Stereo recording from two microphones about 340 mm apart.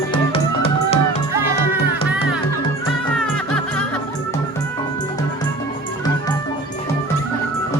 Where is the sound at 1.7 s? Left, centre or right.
Centre.